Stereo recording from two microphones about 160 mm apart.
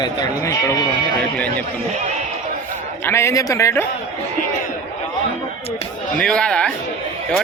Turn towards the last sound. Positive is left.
turn(degrees=5)  # may be behind; listen again after turning